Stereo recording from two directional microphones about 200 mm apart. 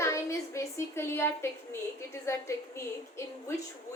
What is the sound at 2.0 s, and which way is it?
A woman's voice, 15° left (ahead or behind).